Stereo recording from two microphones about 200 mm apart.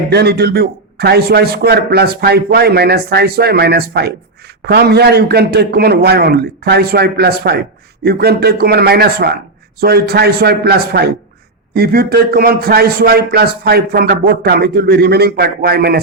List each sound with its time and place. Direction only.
0.1 s a man's voice: 55° right (ahead or behind)